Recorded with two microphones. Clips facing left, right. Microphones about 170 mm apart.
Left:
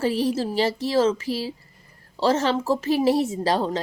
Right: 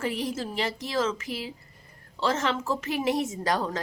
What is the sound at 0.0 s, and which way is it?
A woman's voice, 35° left (ahead or behind).